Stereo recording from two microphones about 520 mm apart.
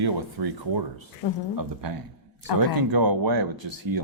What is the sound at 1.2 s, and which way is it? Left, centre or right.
Speech, left.